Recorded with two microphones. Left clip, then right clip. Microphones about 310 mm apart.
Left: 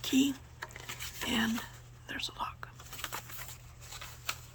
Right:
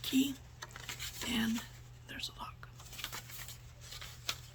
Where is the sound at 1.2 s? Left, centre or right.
Centre.